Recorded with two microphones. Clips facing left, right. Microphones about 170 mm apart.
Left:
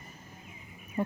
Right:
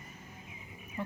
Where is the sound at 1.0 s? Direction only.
40° left (ahead or behind).